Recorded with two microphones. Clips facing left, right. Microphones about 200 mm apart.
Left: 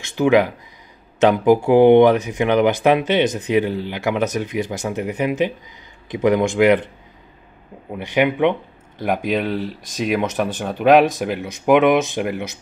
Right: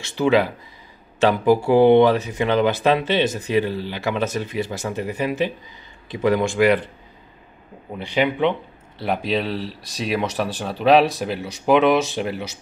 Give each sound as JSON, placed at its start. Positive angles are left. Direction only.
{"t": 0.0, "sound": "speech", "side_deg": 15}
{"t": 8.0, "sound": "speech", "side_deg": 15}